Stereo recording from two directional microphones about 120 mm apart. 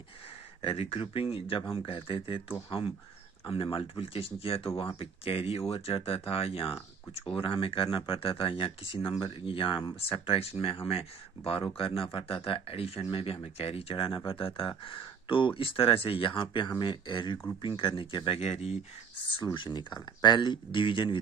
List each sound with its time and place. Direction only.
0.6 s speech: 55° left (ahead or behind)
3.4 s speech: 50° left (ahead or behind)
18.4 s speech: 65° left (ahead or behind)
19.5 s speech: 40° left (ahead or behind)